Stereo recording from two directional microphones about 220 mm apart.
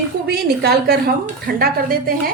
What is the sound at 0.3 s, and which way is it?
A woman's voice, 45° right (ahead or behind).